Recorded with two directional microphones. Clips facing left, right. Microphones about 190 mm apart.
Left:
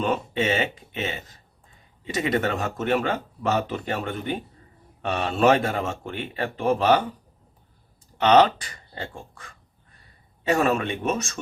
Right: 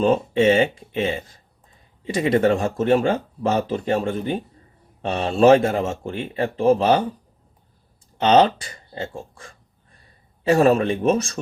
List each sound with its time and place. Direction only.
0.0 s speech: 30° right (ahead or behind)
8.2 s a man's voice: 25° right (ahead or behind)